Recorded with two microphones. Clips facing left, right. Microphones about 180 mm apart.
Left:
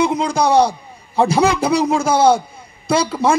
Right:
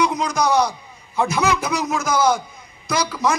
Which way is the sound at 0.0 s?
30° left (ahead or behind).